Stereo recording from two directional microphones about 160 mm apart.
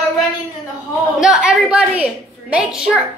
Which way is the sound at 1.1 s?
5° right (ahead or behind).